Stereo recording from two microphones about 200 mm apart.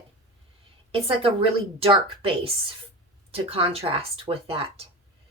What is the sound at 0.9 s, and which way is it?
A woman's voice, 25° right (ahead or behind).